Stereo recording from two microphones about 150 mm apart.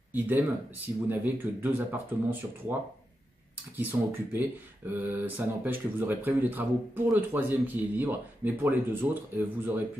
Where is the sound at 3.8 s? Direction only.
10° right (ahead or behind).